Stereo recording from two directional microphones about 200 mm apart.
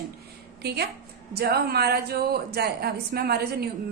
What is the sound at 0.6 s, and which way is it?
Speech, 55° right (ahead or behind).